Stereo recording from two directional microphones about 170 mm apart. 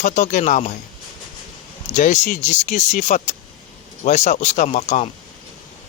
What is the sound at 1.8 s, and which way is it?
Speech, 45° left (ahead or behind).